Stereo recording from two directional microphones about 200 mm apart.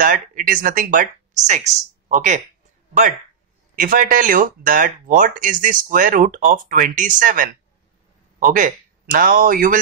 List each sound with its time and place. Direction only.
0.0 s speech: 40° right (ahead or behind)
3.7 s speech: 45° right (ahead or behind)